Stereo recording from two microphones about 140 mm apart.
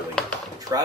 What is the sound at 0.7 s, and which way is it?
Speech, 25° right (ahead or behind).